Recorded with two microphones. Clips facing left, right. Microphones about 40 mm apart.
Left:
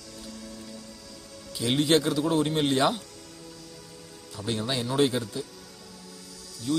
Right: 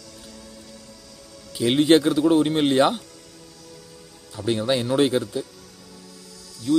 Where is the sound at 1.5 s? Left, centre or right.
Right.